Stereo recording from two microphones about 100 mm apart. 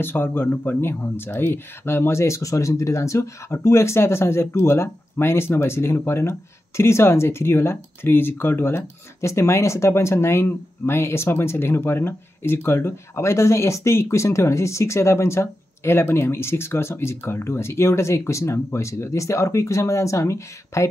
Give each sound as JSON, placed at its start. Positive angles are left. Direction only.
{"t": 0.0, "sound": "speech", "side_deg": 20}